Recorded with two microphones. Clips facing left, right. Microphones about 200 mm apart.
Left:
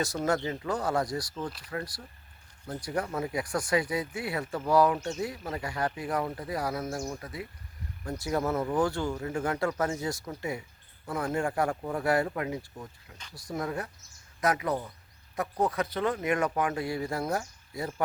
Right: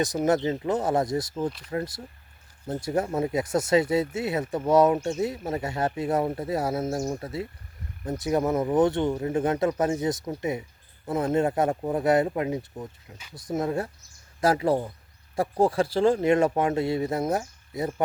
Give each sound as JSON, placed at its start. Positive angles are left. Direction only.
{"t": 0.0, "sound": "speech", "side_deg": -20}